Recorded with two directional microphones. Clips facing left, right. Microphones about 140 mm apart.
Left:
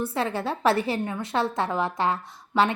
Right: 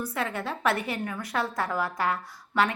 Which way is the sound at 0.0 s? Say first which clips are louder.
Left 4 dB; 30° left (ahead or behind).